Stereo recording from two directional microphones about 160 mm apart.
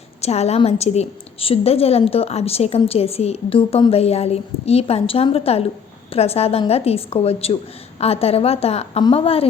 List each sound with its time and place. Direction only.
0.2 s a woman's voice: 40° left (ahead or behind)